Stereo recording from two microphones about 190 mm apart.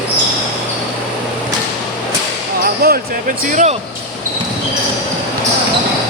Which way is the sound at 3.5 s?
40° right (ahead or behind).